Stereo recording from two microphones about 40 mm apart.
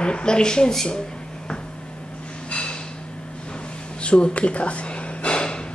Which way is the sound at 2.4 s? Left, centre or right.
Left.